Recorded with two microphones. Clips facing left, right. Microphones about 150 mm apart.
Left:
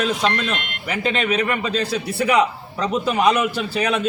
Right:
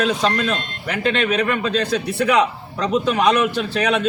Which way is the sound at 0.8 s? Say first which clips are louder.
Right 2 dB; 5° left (ahead or behind).